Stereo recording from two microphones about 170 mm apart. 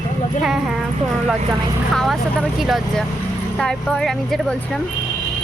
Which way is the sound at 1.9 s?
Centre (ahead or behind).